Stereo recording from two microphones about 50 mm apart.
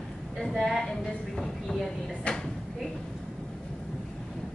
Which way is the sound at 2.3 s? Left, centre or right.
Left.